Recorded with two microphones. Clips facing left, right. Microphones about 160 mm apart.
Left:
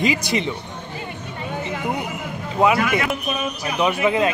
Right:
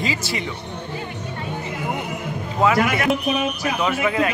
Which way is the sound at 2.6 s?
15° left (ahead or behind).